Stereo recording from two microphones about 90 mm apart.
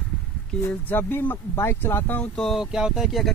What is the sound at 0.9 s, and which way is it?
Speech, 25° left (ahead or behind).